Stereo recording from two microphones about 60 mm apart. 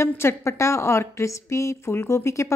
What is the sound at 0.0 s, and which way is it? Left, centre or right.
Speech, left.